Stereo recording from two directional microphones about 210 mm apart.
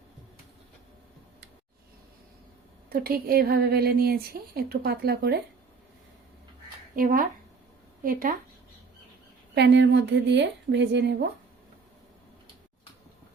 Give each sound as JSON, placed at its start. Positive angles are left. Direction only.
{"t": 2.9, "sound": "speech", "side_deg": -45}
{"t": 6.9, "sound": "speech", "side_deg": -40}
{"t": 9.6, "sound": "a woman's voice", "side_deg": -55}